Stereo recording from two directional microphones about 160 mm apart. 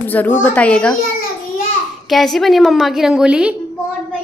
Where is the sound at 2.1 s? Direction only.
Centre (ahead or behind).